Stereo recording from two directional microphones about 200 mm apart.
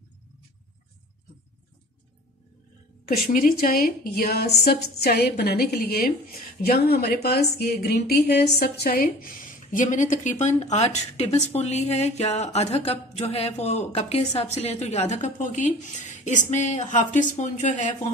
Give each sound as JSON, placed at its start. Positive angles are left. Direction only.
{"t": 3.1, "sound": "a woman's voice", "side_deg": 50}